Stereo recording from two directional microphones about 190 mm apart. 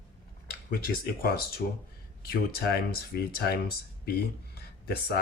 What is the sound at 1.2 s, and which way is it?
Speech, 50° left (ahead or behind).